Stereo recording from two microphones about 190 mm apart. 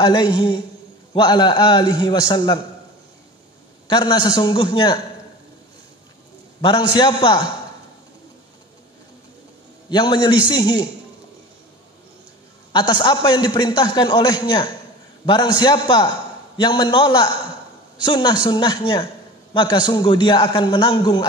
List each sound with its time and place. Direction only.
0.0 s a man's voice: 20° left (ahead or behind)
3.8 s a man's voice: 20° left (ahead or behind)
6.6 s a man's voice: 25° left (ahead or behind)
9.8 s a man's voice: 25° left (ahead or behind)
12.7 s a man's voice: 25° left (ahead or behind)